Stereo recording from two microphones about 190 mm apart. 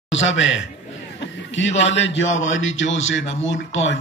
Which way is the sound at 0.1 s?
80° left.